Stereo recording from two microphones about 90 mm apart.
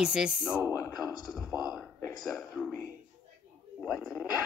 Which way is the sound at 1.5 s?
5° right (ahead or behind).